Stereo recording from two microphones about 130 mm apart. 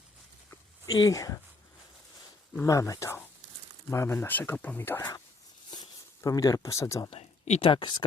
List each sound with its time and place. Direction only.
0.9 s speech: 30° left (ahead or behind)
2.6 s speech: 25° left (ahead or behind)
7.1 s a sound: 55° left (ahead or behind)
7.7 s speech: 40° left (ahead or behind)